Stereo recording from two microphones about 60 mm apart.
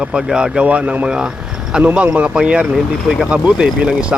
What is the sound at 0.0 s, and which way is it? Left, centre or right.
Speech, centre.